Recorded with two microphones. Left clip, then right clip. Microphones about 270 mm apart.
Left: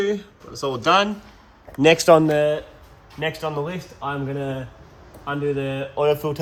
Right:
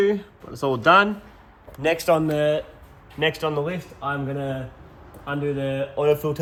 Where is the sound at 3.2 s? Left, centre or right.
Centre.